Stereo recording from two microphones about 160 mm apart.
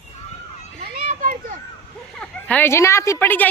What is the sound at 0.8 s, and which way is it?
Children playing, 50° right (ahead or behind).